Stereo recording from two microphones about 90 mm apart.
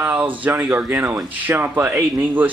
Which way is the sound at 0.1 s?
15° right (ahead or behind).